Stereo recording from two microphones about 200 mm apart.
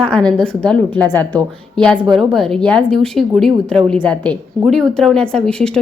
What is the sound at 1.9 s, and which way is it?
Speech, 20° right (ahead or behind).